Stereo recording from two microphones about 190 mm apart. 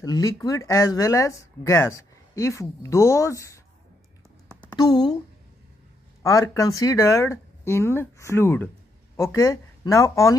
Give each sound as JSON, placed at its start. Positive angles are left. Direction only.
{"t": 0.0, "sound": "speech", "side_deg": 20}
{"t": 4.6, "sound": "speech", "side_deg": 20}
{"t": 6.2, "sound": "speech", "side_deg": 20}